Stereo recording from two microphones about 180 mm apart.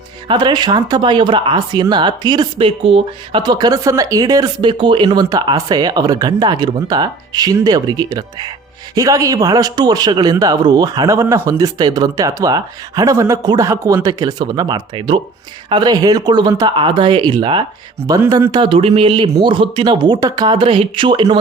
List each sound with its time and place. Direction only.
0.3 s speech: 25° right (ahead or behind)